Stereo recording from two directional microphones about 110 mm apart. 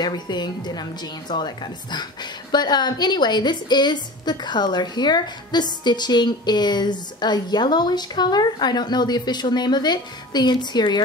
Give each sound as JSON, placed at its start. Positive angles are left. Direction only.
{"t": 0.0, "sound": "a woman's voice", "side_deg": 40}